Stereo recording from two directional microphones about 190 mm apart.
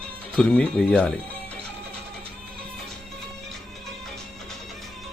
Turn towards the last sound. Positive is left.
turn(degrees=0)  # may be behind; listen again after turning